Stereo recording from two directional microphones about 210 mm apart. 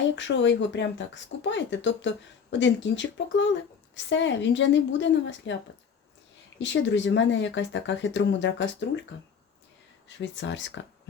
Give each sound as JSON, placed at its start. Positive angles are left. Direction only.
{"t": 0.2, "sound": "speech", "side_deg": 60}
{"t": 6.6, "sound": "speech", "side_deg": 60}
{"t": 10.2, "sound": "speech", "side_deg": 60}